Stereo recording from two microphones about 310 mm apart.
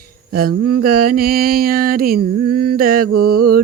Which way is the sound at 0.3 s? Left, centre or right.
Right.